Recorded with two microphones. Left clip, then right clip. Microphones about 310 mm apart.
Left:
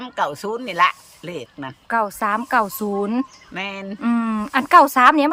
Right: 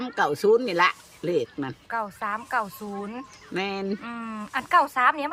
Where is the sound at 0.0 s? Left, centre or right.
Centre.